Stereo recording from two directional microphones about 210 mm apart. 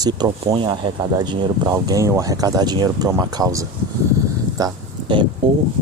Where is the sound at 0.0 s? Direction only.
20° right (ahead or behind).